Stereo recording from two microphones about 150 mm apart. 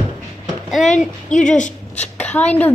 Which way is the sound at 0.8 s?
55° left (ahead or behind).